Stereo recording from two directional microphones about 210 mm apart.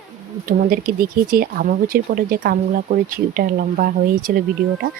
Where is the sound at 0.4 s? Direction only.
45° right (ahead or behind).